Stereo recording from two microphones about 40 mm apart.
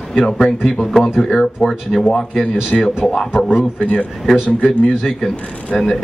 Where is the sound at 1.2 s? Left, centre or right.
Left.